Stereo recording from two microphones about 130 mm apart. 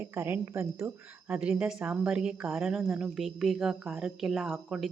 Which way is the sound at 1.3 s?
10° right (ahead or behind).